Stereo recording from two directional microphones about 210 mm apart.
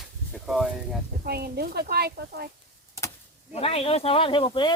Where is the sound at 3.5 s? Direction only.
30° left (ahead or behind).